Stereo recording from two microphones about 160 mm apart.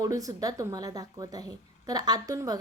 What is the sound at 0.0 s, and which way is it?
A woman's voice, 20° right (ahead or behind).